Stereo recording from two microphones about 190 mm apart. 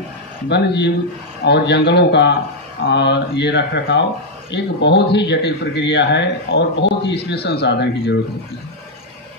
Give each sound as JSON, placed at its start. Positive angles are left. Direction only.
{"t": 0.5, "sound": "speech", "side_deg": 65}